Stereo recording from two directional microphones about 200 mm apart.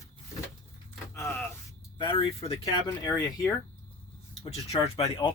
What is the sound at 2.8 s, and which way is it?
Speech, 15° left (ahead or behind).